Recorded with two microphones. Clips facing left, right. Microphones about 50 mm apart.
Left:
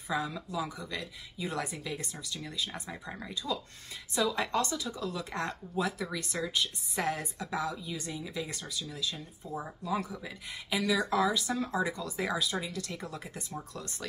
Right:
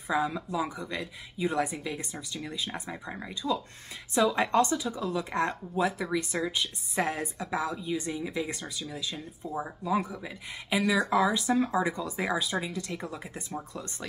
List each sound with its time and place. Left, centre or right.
0.1 s speech: right
4.7 s speech: centre